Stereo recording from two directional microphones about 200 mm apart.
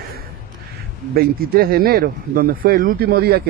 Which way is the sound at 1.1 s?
50° right (ahead or behind).